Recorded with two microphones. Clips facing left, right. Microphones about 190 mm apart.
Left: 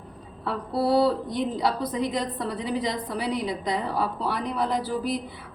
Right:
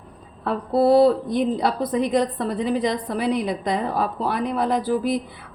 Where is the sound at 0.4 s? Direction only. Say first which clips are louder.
Right 7 dB; 50° right (ahead or behind).